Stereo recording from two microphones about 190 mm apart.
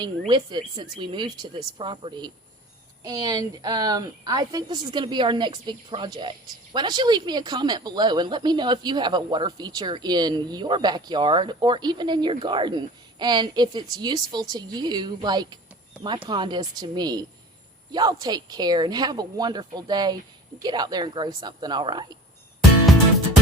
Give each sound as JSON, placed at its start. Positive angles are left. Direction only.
{"t": 0.3, "sound": "speech", "side_deg": -25}